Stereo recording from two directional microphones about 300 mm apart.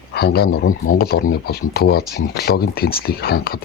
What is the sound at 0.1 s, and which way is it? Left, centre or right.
Speech, left.